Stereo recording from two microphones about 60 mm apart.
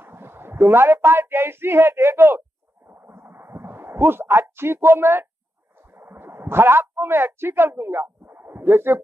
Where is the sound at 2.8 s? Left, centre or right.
Right.